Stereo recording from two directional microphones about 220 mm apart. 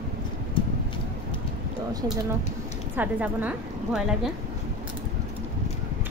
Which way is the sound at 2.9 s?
10° right (ahead or behind).